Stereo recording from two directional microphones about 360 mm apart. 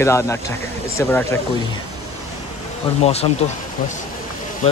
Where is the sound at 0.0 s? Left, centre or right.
Centre.